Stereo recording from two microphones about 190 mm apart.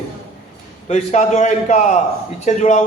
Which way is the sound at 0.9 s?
35° left (ahead or behind).